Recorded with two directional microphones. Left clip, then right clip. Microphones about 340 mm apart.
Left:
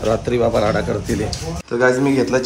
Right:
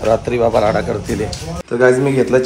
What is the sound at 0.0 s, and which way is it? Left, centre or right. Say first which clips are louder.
Speech: right 3 dB; centre.